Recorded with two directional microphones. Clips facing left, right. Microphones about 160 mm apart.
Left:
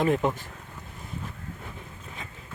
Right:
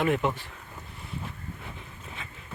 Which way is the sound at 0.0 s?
35° left (ahead or behind).